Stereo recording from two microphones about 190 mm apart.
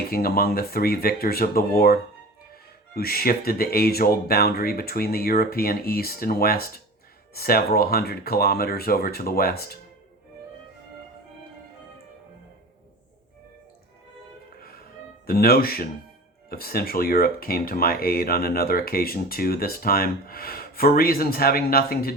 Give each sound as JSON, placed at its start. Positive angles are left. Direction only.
{"t": 0.1, "sound": "speech", "side_deg": 55}
{"t": 14.6, "sound": "music", "side_deg": 50}
{"t": 15.3, "sound": "speech", "side_deg": 50}